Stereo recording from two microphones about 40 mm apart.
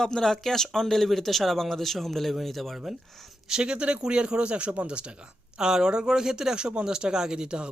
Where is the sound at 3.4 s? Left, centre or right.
Right.